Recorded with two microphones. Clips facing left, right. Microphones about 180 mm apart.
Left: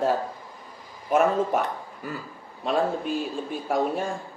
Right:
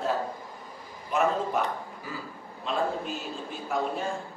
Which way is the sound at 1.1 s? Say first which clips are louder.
Left 6 dB; 50° left (ahead or behind).